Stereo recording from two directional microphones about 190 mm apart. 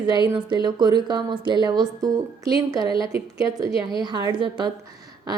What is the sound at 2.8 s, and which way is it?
Speech, 30° left (ahead or behind).